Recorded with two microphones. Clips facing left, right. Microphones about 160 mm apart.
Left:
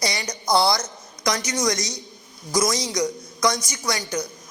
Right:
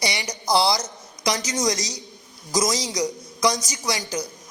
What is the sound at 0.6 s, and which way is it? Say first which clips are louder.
A man's voice: left 1 dB; 10° right (ahead or behind).